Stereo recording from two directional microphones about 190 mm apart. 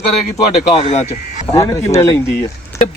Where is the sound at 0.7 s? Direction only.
30° left (ahead or behind).